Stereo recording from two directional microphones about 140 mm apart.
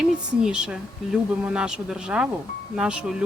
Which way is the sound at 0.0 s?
5° right (ahead or behind).